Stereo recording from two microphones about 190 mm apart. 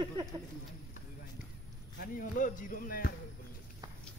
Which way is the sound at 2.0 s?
45° left (ahead or behind).